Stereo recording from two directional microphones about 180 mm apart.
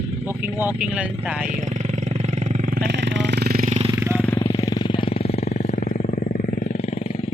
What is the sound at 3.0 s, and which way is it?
Jackhammer, 80° right.